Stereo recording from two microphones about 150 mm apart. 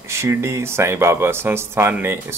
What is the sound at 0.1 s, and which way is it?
Speech, 20° right (ahead or behind).